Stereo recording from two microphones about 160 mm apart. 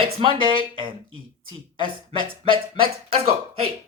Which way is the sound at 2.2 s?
35° right (ahead or behind).